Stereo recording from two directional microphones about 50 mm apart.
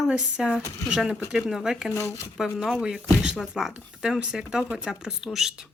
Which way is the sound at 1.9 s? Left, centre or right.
Left.